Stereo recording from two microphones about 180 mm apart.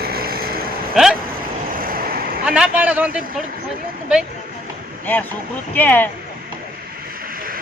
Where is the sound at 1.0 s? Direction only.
5° right (ahead or behind).